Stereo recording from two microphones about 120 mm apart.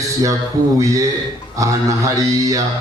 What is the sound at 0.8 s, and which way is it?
Mantra, 30° right (ahead or behind).